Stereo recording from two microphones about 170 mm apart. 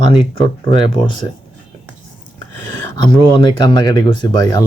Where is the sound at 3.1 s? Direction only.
25° left (ahead or behind).